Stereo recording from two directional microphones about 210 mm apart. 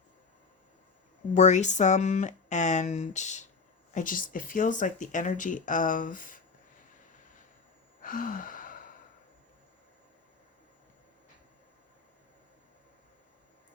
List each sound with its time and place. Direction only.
1.3 s speech: 35° left (ahead or behind)
8.0 s gasp: 40° left (ahead or behind)